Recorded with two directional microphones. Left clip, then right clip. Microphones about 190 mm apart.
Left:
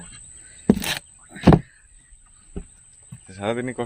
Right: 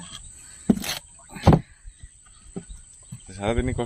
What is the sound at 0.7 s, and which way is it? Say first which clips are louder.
Speech: left 4 dB; 40° left (ahead or behind).